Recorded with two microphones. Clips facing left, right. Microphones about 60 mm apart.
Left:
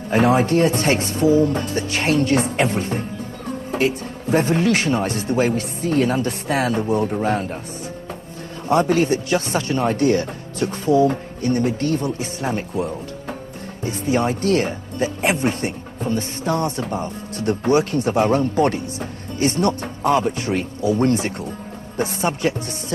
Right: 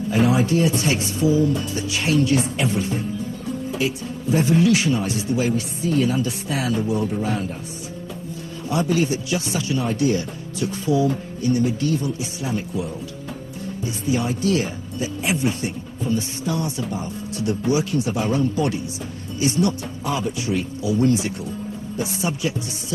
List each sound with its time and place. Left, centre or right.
0.1 s speech: left
8.6 s speech: left